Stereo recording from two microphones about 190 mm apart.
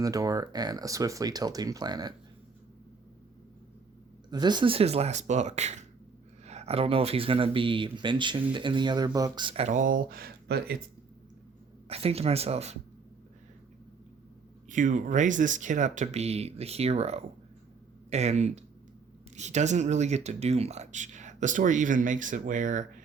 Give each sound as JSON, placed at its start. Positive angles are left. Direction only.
{"t": 0.0, "sound": "speech", "side_deg": -20}
{"t": 4.3, "sound": "speech", "side_deg": -20}
{"t": 11.9, "sound": "speech", "side_deg": -30}
{"t": 14.7, "sound": "speech", "side_deg": -40}